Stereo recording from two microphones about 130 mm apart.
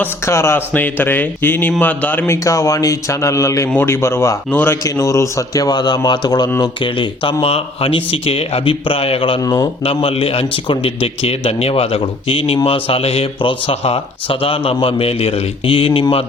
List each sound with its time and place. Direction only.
0.0 s a man's voice: 20° left (ahead or behind); by 16.2 s 45° left (ahead or behind)